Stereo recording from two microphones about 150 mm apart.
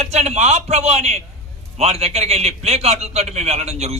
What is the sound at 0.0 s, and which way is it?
A man's voice, 45° right (ahead or behind).